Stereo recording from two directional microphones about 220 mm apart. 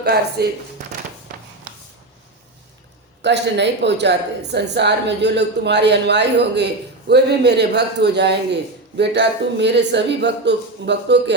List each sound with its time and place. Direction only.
0.0 s speech: 50° right (ahead or behind)
3.2 s speech: 50° right (ahead or behind)